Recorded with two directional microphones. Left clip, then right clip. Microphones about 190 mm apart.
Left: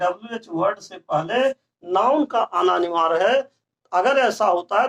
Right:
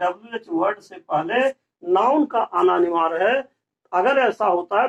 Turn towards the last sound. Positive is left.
turn(degrees=20)  # may be behind; listen again after turning